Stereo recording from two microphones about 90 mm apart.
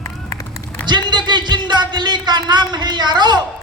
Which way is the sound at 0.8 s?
55° right (ahead or behind).